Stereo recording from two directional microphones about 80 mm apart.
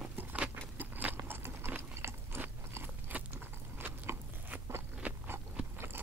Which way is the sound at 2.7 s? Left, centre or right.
Right.